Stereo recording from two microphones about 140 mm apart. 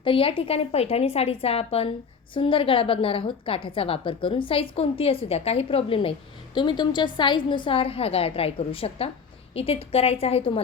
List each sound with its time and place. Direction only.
0.0 s a woman's voice: 40° left (ahead or behind)